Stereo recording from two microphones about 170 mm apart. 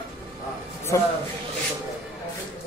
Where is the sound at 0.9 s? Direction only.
15° left (ahead or behind).